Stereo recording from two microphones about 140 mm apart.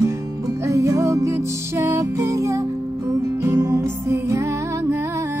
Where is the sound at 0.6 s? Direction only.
20° right (ahead or behind).